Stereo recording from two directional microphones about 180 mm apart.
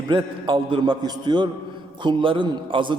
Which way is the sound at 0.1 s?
25° right (ahead or behind).